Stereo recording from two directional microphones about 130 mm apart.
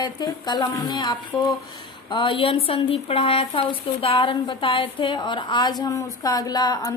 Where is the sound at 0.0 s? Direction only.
30° left (ahead or behind).